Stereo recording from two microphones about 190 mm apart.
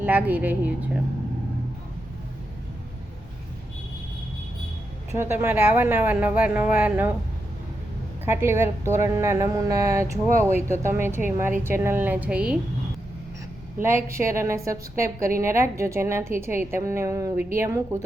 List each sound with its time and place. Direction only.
0.0 s a woman's voice: 10° right (ahead or behind)
5.1 s a woman's voice: 10° right (ahead or behind)
8.2 s a woman's voice: 15° right (ahead or behind)
13.8 s a woman's voice: 15° right (ahead or behind)